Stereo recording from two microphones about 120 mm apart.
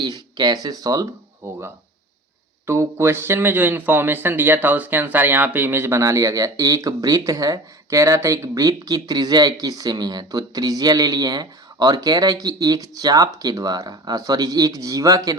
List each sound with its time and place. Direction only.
0.0 s speech: 35° right (ahead or behind)
1.4 s a man's voice: 20° right (ahead or behind)
2.6 s a man's voice: 20° right (ahead or behind)